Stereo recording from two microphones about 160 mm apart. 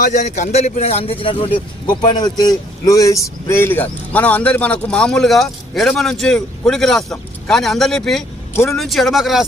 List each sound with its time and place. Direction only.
0.0 s a man's voice: 50° left (ahead or behind); by 9.4 s centre (ahead or behind)